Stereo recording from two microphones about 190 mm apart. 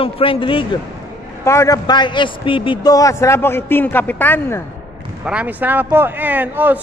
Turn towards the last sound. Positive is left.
turn(degrees=-10)  # may be behind; listen again after turning